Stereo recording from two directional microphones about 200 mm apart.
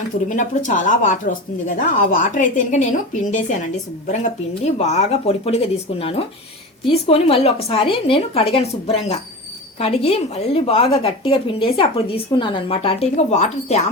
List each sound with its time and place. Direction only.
0.3 s a woman's voice: 40° left (ahead or behind)
4.0 s a woman's voice: 35° left (ahead or behind)